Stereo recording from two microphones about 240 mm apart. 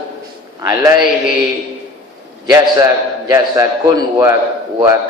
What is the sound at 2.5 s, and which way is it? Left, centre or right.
A man's voice, centre.